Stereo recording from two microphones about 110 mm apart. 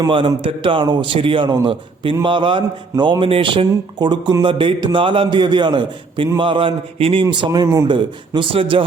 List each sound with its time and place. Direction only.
0.1 s a man's voice: 50° right (ahead or behind); by 7.9 s 30° right (ahead or behind)
7.9 s a man's voice: 45° right (ahead or behind)